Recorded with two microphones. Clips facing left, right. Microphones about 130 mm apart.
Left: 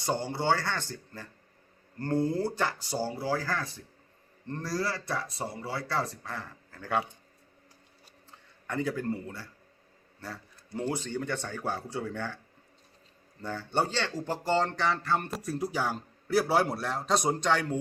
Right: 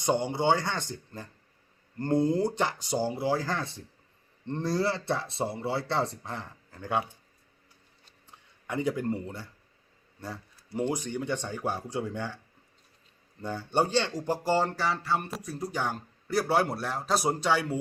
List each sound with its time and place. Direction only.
0.0 s speech: 20° right (ahead or behind)
8.3 s speech: 15° right (ahead or behind)
13.4 s speech: 15° right (ahead or behind)